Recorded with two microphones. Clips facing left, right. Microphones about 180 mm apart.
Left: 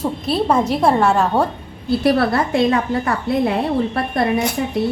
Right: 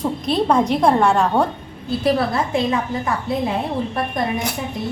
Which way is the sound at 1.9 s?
70° left (ahead or behind).